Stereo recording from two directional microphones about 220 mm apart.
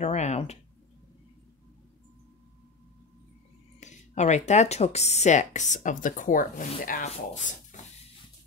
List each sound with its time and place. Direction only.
0.0 s speech: 30° left (ahead or behind)
3.8 s speech: 30° left (ahead or behind)